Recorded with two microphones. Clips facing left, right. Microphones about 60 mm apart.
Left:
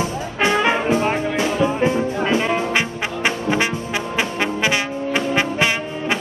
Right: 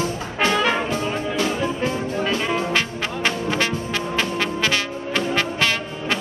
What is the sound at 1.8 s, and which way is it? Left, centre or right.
Music, left.